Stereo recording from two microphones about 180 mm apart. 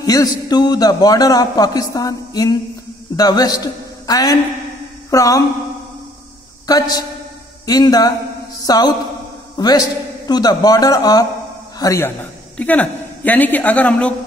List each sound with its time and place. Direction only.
0.0 s a man's voice: 20° left (ahead or behind)
6.7 s a man's voice: 20° left (ahead or behind)
8.6 s mantra: 20° left (ahead or behind)
9.6 s a man's voice: 20° left (ahead or behind)